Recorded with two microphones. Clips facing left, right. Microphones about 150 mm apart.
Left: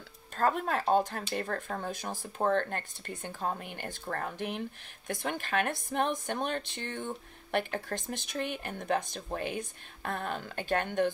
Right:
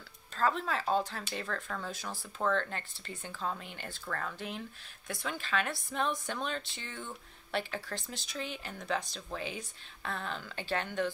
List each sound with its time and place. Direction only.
0.4 s speech: 50° left (ahead or behind)